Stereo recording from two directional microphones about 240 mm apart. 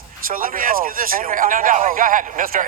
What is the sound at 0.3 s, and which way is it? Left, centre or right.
Speech, right.